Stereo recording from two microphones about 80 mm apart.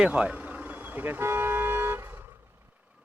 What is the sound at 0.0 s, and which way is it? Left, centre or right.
Vehicle, centre.